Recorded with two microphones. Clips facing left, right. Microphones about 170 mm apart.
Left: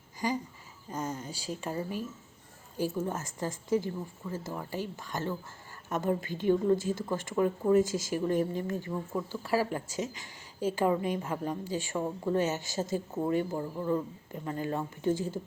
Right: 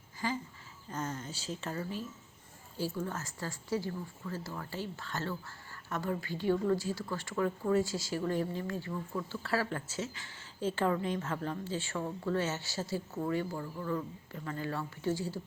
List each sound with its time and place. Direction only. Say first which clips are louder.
0.2 s speech: left 4 dB; 15° left (ahead or behind)